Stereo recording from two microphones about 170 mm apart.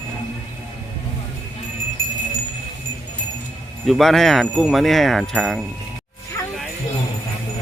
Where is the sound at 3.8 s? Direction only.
Centre (ahead or behind).